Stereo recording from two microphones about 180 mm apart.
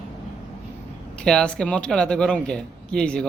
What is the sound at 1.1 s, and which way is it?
A man's voice, 5° left (ahead or behind).